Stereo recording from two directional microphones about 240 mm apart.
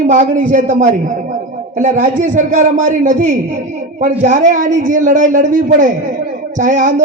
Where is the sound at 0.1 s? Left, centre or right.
Right.